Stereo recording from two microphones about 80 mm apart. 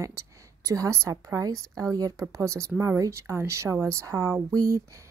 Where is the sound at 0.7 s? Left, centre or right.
Right.